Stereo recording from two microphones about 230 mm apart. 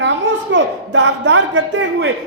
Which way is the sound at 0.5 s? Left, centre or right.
Right.